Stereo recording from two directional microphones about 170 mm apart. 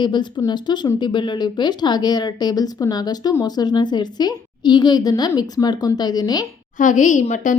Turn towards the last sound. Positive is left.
turn(degrees=45)  # may be behind; listen again after turning